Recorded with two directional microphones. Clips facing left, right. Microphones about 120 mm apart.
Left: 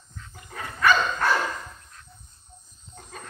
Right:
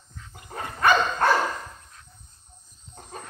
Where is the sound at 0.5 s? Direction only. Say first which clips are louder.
Right 1 dB; 30° right (ahead or behind).